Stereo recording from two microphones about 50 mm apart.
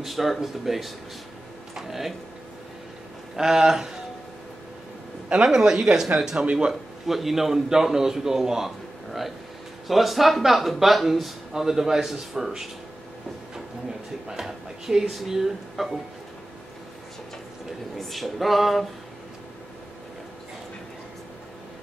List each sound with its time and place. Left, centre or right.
0.0 s speech: centre
3.3 s speech: centre
5.3 s speech: centre
6.7 s a man's voice: centre
14.3 s speech: centre
17.9 s speech: centre